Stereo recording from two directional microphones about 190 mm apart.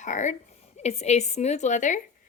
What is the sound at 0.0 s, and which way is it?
A woman's voice, 40° left (ahead or behind).